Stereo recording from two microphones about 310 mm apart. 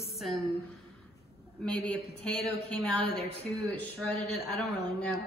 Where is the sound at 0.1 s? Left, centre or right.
Centre.